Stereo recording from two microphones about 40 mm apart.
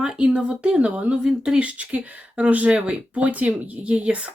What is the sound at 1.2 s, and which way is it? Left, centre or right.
Speech, centre.